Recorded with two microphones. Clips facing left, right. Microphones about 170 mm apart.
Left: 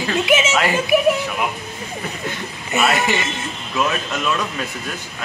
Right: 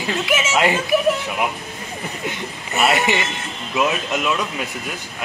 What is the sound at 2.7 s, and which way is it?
A man's voice, 20° right (ahead or behind).